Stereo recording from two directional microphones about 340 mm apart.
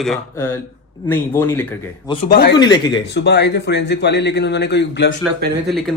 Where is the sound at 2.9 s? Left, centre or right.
Left.